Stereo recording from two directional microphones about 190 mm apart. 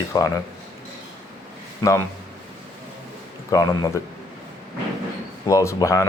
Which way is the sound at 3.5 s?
20° left (ahead or behind).